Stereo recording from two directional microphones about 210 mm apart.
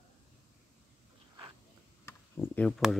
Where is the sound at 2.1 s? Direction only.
10° left (ahead or behind).